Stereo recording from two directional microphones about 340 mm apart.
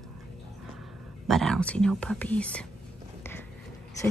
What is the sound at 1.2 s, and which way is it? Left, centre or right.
Speech, centre.